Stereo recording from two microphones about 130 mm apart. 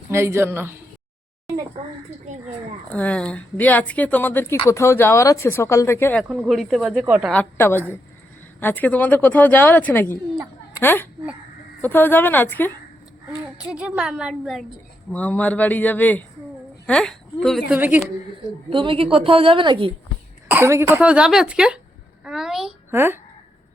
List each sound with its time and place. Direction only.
0.1 s speech: 20° right (ahead or behind)
2.9 s speech: 10° left (ahead or behind)
6.2 s a child's voice: 5° right (ahead or behind)
7.3 s a child's voice: 15° left (ahead or behind)
13.4 s a child's voice: 5° right (ahead or behind)
15.1 s speech: 10° left (ahead or behind)
17.7 s speech: 10° right (ahead or behind)
18.7 s a woman's voice: 40° right (ahead or behind)
20.5 s speech: 20° right (ahead or behind)
22.2 s a sound: 5° right (ahead or behind)
22.9 s speech: 15° right (ahead or behind)